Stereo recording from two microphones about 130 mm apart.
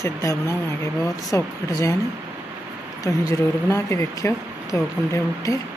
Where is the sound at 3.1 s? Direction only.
25° left (ahead or behind).